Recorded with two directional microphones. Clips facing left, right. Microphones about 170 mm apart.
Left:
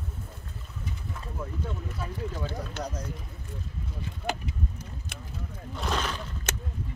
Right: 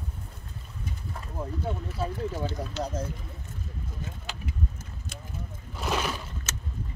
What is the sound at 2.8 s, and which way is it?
Speech, 25° right (ahead or behind).